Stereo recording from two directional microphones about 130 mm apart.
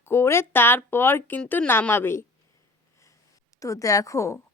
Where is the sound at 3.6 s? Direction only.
25° left (ahead or behind).